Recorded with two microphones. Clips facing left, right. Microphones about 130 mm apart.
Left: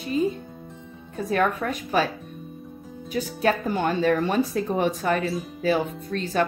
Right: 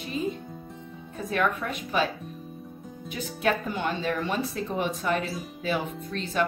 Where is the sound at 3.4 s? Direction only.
45° left (ahead or behind).